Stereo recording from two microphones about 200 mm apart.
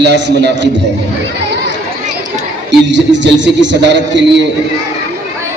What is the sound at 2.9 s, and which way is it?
A man's voice, 65° right (ahead or behind).